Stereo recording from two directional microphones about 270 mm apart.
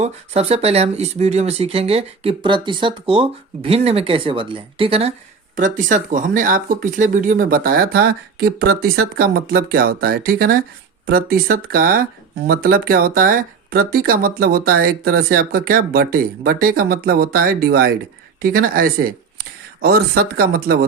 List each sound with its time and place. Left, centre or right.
0.0 s speech: right